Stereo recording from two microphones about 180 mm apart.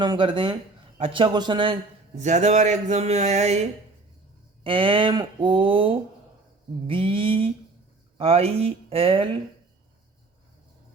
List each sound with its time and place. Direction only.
0.0 s a man's voice: 25° right (ahead or behind)
2.2 s speech: 40° right (ahead or behind)